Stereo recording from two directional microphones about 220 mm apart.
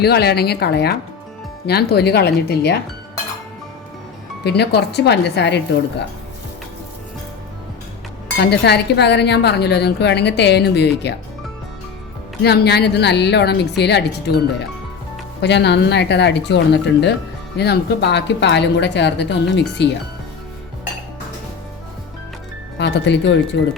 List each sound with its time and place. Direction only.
0.0 s speech: 45° left (ahead or behind)
4.4 s speech: 50° left (ahead or behind)
8.4 s speech: 50° left (ahead or behind)
12.4 s speech: 50° left (ahead or behind)
15.4 s speech: 50° left (ahead or behind)
22.8 s speech: 50° left (ahead or behind)